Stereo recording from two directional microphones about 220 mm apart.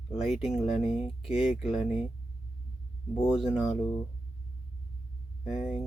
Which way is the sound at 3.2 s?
5° right (ahead or behind).